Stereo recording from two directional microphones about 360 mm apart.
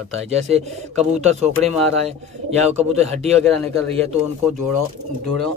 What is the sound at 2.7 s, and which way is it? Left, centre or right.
Speech, centre.